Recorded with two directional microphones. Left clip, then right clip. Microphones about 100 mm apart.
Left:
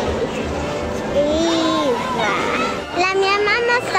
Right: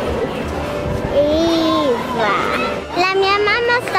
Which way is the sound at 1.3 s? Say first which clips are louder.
Right 2 dB; 10° right (ahead or behind).